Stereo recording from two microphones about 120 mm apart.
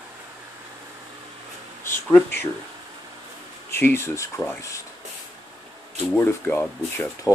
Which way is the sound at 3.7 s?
20° left (ahead or behind).